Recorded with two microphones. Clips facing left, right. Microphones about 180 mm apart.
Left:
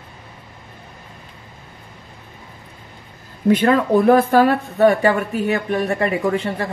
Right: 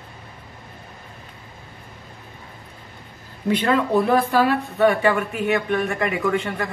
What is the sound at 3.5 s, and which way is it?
A woman's voice, 45° left (ahead or behind).